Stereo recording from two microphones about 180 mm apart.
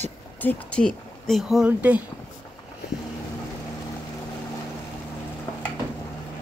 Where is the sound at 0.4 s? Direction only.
10° left (ahead or behind); by 2.0 s 10° right (ahead or behind).